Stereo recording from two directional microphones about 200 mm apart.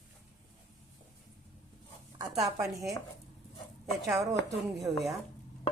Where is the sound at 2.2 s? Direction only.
15° right (ahead or behind).